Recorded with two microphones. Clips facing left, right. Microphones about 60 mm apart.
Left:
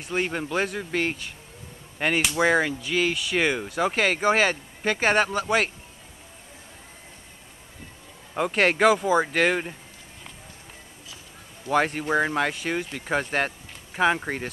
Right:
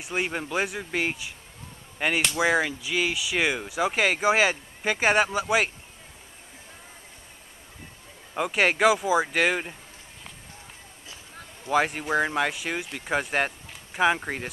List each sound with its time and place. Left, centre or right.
0.0 s speech: centre
8.4 s speech: centre
11.6 s speech: centre